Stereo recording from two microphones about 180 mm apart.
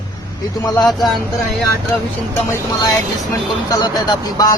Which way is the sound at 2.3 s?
15° left (ahead or behind).